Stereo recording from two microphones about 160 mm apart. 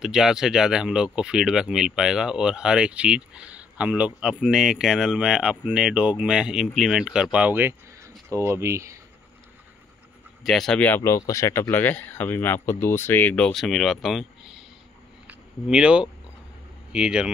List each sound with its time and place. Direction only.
0.0 s speech: 5° right (ahead or behind)
10.4 s speech: centre (ahead or behind)